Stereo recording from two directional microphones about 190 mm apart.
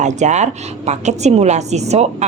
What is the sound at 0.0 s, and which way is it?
Speech, 40° right (ahead or behind).